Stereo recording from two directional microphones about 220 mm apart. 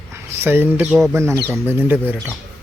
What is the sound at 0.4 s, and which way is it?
Speech, 10° right (ahead or behind).